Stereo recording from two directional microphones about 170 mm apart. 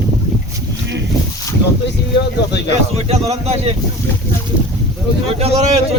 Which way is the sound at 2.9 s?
40° right (ahead or behind).